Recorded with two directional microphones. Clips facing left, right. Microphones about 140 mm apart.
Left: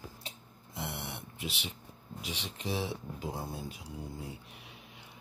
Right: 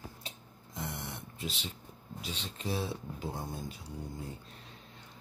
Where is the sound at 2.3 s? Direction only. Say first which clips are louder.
Even; 80° left.